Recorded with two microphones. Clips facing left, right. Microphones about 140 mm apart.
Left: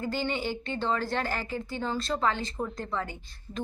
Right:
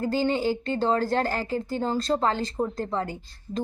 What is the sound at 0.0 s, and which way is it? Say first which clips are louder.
A woman's voice: right 6 dB; 40° right (ahead or behind).